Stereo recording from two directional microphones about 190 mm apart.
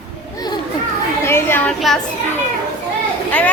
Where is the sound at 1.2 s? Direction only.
10° left (ahead or behind).